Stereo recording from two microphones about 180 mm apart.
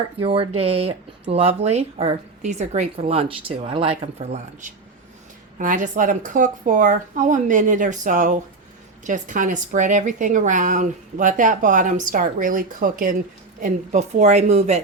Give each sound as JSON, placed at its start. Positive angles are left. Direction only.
{"t": 0.2, "sound": "a woman's voice", "side_deg": -30}